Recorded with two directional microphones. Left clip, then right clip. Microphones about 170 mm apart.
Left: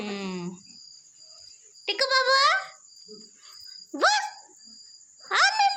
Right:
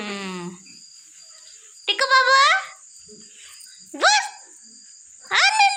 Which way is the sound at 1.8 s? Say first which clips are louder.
Right 6 dB; centre (ahead or behind).